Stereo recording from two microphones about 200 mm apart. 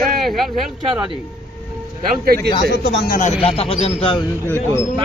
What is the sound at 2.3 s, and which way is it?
Speech, 50° right (ahead or behind).